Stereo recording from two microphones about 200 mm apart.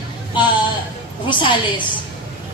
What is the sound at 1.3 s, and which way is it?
Speech, 25° left (ahead or behind).